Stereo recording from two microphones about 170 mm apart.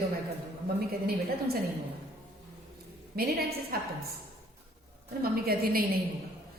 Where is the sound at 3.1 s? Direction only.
65° right (ahead or behind).